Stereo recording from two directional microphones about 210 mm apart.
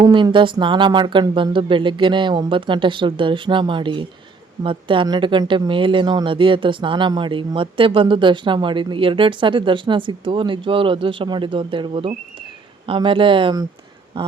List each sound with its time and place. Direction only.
0.0 s speech: 25° right (ahead or behind)